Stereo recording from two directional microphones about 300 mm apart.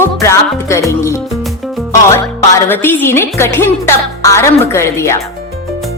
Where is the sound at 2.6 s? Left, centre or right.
Centre.